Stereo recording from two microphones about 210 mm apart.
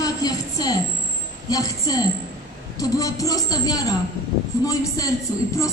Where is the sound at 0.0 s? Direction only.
20° left (ahead or behind).